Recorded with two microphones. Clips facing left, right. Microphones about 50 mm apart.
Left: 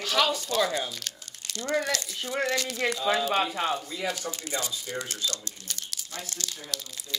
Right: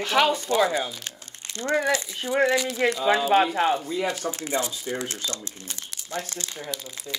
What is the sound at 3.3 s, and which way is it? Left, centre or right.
Speech, right.